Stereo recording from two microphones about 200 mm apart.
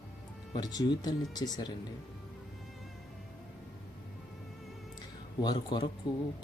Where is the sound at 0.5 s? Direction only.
20° left (ahead or behind).